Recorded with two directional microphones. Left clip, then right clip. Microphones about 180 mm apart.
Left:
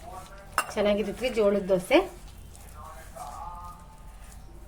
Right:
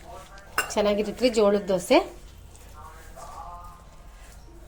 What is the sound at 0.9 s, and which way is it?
A woman's voice, 35° right (ahead or behind).